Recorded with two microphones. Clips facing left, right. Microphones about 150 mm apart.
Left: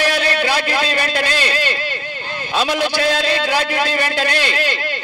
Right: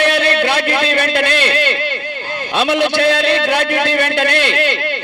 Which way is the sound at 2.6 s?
60° right (ahead or behind).